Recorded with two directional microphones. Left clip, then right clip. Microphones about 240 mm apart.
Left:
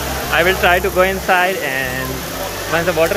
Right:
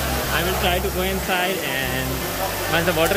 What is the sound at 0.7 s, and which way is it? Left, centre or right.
Speech, centre.